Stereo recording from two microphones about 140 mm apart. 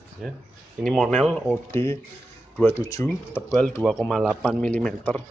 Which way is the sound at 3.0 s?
10° left (ahead or behind).